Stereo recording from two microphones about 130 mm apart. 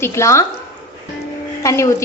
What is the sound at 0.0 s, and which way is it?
Speech, 20° left (ahead or behind).